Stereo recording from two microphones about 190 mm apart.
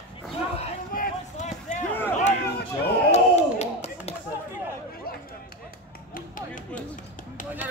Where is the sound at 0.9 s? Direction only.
45° left (ahead or behind).